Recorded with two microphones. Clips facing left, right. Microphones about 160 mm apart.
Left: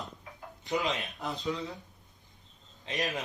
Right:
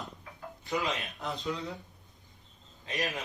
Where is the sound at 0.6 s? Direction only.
20° left (ahead or behind).